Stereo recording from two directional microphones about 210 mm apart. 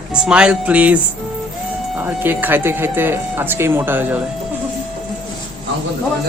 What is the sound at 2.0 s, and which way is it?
Speech, 10° right (ahead or behind).